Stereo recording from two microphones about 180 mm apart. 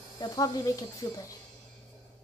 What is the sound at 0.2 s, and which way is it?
Speech, 20° left (ahead or behind).